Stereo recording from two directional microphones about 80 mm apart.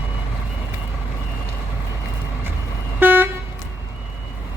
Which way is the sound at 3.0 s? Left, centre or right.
Right.